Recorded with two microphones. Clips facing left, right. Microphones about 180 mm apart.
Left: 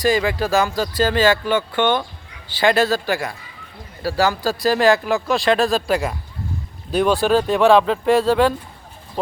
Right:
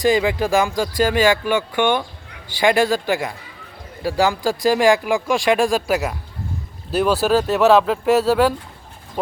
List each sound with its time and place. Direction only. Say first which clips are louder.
0.0 s speech: right 1 dB; 20° right (ahead or behind)